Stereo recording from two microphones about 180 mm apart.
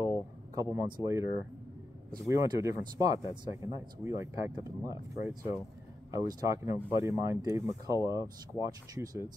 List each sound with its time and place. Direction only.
0.6 s speech: 15° right (ahead or behind)